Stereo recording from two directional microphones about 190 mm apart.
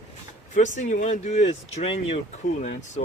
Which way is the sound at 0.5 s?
40° left (ahead or behind).